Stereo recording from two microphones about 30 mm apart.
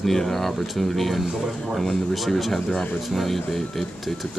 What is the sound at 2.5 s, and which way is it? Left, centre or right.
Speech, centre.